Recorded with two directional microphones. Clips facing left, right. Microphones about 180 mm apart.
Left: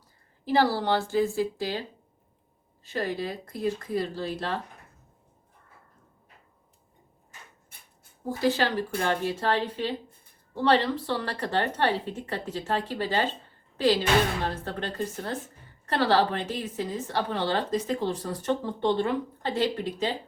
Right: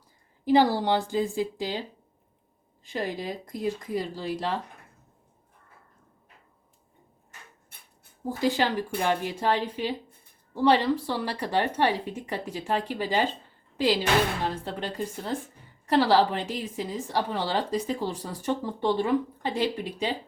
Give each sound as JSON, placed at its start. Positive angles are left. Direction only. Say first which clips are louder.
{"t": 0.4, "sound": "a woman's voice", "louder": "right 3 dB", "side_deg": -20}
{"t": 2.8, "sound": "a woman's voice", "louder": "left 1 dB", "side_deg": -15}
{"t": 8.4, "sound": "a woman's voice", "louder": "even", "side_deg": -15}